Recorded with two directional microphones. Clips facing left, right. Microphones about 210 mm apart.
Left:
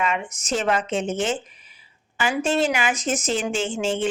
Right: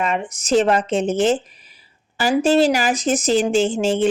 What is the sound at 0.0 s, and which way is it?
Speech, 35° right (ahead or behind).